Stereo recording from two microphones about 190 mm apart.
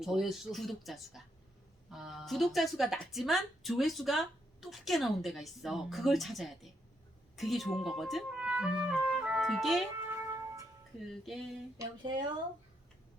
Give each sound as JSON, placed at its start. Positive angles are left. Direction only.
{"t": 0.0, "sound": "a woman's voice", "side_deg": 0}
{"t": 10.1, "sound": "music", "side_deg": -15}
{"t": 11.3, "sound": "a woman's voice", "side_deg": 0}
{"t": 11.8, "sound": "speech", "side_deg": -25}